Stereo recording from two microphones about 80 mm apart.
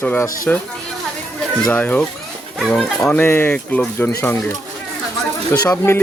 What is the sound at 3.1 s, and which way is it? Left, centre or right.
A child's voice, left.